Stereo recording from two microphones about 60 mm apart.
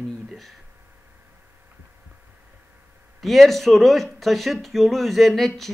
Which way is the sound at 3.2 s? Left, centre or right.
Centre.